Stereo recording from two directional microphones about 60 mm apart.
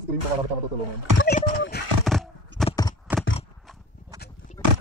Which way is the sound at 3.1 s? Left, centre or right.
Right.